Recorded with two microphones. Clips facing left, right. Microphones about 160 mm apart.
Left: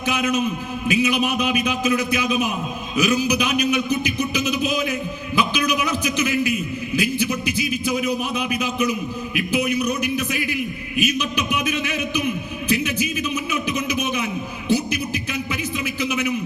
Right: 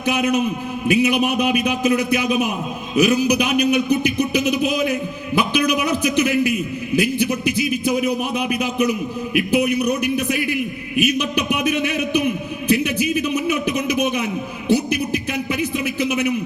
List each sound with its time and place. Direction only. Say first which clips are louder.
0.0 s a man's voice: right 3 dB; 60° right (ahead or behind)